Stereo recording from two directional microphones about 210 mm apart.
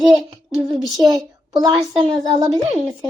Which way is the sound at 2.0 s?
25° right (ahead or behind).